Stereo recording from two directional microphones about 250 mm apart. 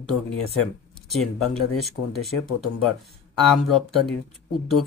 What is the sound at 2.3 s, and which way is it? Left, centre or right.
Speech, left.